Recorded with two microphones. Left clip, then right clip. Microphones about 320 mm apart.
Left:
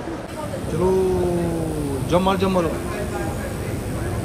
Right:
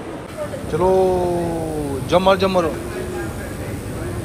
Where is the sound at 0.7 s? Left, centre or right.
Centre.